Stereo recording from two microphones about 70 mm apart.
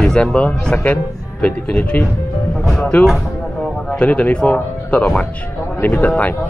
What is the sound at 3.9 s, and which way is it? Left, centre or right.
Speech, left.